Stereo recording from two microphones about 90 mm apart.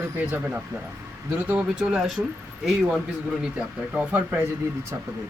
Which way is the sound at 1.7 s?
10° right (ahead or behind).